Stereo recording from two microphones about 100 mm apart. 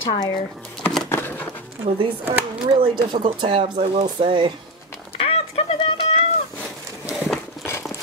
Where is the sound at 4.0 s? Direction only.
60° right (ahead or behind).